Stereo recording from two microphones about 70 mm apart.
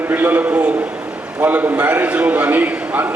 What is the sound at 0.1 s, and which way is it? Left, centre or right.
A man's voice, right.